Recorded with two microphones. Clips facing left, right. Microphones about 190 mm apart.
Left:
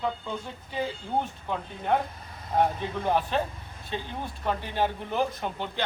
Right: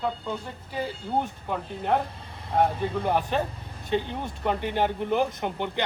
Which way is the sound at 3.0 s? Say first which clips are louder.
Left 1 dB; 15° right (ahead or behind).